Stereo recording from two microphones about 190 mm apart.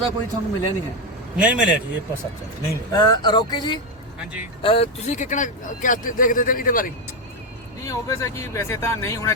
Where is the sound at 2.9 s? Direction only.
25° left (ahead or behind); by 6.9 s 45° left (ahead or behind).